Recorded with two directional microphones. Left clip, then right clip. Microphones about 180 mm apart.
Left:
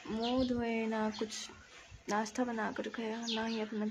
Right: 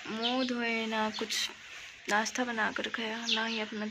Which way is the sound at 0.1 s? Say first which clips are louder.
Right 2 dB; centre (ahead or behind).